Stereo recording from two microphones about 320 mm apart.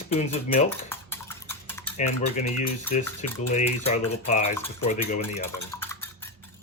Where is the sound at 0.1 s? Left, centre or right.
Centre.